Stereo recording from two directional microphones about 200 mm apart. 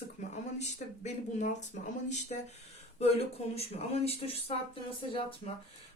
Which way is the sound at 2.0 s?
35° left (ahead or behind).